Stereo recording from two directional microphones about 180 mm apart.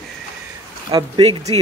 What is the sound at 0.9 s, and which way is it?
Speech, 25° right (ahead or behind).